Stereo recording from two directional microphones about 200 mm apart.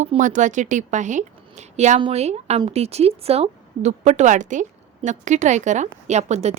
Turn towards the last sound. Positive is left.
turn(degrees=-35)  # may be behind; listen again after turning